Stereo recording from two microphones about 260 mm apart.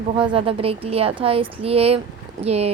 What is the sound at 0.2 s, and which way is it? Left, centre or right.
A woman's voice, right.